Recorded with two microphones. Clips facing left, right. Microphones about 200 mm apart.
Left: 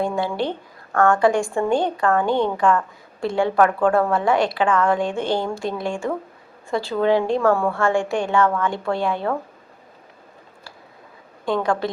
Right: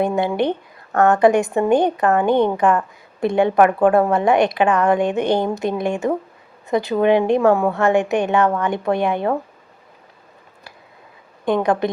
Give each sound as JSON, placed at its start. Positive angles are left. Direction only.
{"t": 0.0, "sound": "a woman's voice", "side_deg": -20}
{"t": 11.4, "sound": "a woman's voice", "side_deg": -20}